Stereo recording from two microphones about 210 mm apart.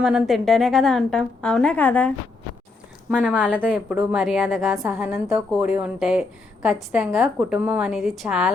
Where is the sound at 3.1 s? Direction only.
5° right (ahead or behind).